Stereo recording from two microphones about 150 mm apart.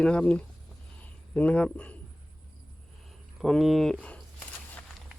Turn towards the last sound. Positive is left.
turn(degrees=5)  # may be behind; listen again after turning